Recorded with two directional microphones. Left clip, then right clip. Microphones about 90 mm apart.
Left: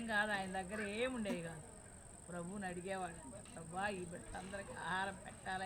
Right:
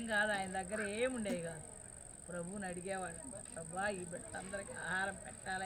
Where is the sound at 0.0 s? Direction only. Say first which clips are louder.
Right 2 dB; 35° left (ahead or behind).